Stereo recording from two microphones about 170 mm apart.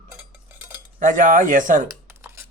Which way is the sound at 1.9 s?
15° right (ahead or behind).